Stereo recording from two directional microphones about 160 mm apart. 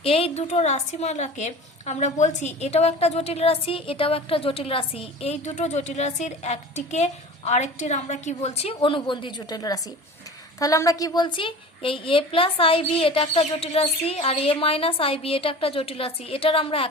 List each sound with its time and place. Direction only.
0.0 s a woman's voice: 35° left (ahead or behind)